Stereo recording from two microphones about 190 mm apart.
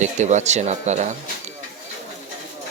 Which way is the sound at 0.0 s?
40° right (ahead or behind).